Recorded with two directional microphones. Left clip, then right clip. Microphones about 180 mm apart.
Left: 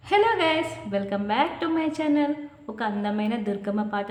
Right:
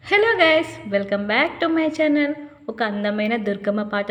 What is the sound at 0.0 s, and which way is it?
A woman's voice, 20° right (ahead or behind).